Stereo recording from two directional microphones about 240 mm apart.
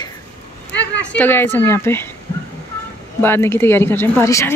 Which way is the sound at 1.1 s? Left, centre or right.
Centre.